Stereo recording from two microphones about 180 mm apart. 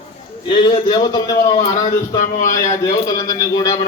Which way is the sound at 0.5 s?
25° left (ahead or behind).